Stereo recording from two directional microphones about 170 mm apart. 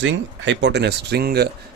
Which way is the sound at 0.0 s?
90° right.